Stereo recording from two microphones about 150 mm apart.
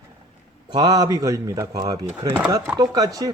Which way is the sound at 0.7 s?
25° right (ahead or behind).